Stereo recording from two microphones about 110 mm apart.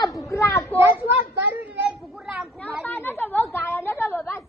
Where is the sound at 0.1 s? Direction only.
30° left (ahead or behind).